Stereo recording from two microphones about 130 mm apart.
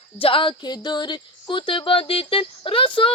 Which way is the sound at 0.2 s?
45° left (ahead or behind).